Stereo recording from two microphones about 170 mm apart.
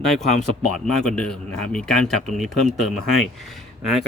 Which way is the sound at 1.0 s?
5° left (ahead or behind).